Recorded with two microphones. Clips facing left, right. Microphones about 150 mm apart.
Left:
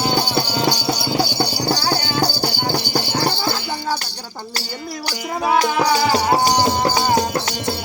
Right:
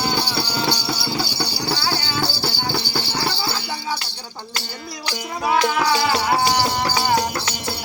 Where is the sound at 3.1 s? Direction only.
50° left (ahead or behind).